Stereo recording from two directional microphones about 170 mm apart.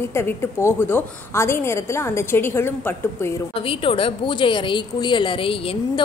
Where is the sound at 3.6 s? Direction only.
30° left (ahead or behind).